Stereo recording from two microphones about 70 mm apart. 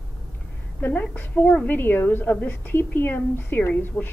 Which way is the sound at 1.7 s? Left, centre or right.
Left.